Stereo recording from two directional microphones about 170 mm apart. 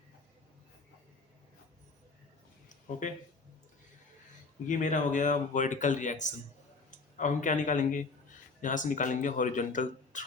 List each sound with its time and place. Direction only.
4.6 s speech: 50° left (ahead or behind)